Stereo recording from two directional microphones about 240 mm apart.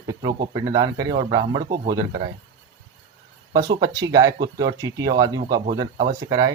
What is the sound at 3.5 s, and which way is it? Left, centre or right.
Speech, centre.